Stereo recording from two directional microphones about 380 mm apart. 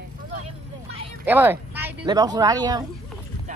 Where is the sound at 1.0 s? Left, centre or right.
Centre.